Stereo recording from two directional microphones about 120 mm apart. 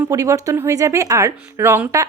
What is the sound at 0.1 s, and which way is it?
A woman's voice, 25° right (ahead or behind).